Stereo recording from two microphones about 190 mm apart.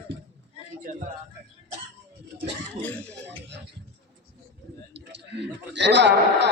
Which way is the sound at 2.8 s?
10° left (ahead or behind).